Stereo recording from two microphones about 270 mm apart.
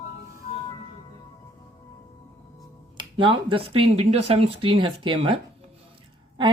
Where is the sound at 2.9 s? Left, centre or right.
Centre.